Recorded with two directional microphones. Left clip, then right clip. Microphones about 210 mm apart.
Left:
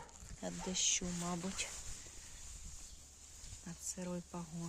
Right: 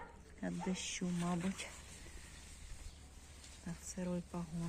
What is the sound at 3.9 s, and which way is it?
Speech, 20° left (ahead or behind).